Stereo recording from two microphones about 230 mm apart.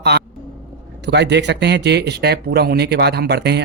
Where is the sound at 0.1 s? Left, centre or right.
Right.